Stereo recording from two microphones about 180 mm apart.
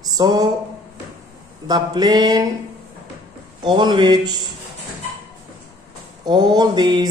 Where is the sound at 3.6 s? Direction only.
25° right (ahead or behind).